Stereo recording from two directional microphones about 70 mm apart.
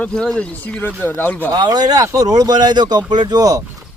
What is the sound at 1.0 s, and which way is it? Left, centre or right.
Speech, left.